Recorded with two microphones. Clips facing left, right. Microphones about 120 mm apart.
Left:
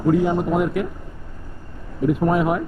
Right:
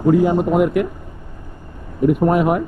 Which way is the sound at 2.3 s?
60° right (ahead or behind).